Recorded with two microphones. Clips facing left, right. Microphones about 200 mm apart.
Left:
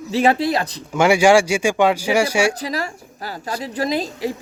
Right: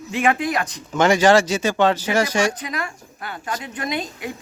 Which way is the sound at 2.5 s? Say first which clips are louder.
Left 4 dB; 35° left (ahead or behind).